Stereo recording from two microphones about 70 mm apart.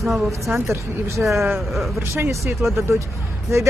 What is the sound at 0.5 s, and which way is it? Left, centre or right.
Speech, right.